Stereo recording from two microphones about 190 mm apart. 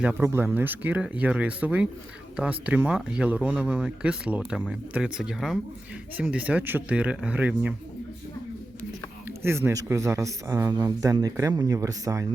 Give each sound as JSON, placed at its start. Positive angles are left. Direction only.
{"t": 0.0, "sound": "speech", "side_deg": -10}
{"t": 9.2, "sound": "speech", "side_deg": -10}